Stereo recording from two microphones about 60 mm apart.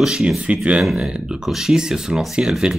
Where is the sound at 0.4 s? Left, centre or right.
Centre.